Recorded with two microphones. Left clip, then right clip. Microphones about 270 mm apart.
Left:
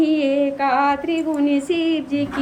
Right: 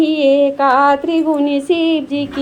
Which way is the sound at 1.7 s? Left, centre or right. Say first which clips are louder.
Right 6 dB; right.